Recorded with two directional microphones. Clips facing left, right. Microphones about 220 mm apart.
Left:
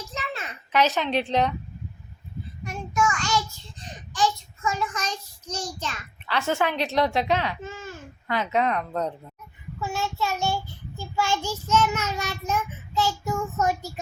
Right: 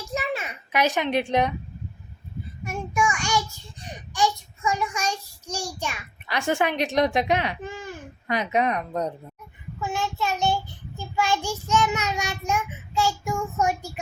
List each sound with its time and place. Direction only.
0.1 s a sound: 10° right (ahead or behind)
1.1 s child singing: 15° right (ahead or behind)
2.6 s child singing: 10° right (ahead or behind)